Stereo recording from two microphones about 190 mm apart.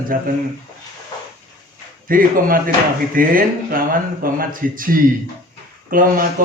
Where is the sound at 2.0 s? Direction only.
50° right (ahead or behind).